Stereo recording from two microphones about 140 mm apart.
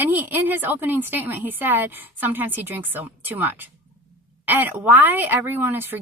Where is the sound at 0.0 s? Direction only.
15° right (ahead or behind).